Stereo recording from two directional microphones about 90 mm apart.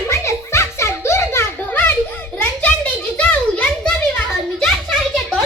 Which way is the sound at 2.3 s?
20° left (ahead or behind).